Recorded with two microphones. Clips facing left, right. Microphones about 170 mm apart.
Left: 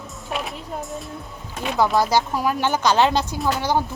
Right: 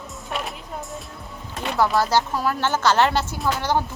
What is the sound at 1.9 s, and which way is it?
Speech, 15° left (ahead or behind).